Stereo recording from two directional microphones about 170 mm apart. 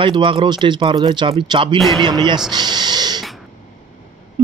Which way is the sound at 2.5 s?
25° right (ahead or behind).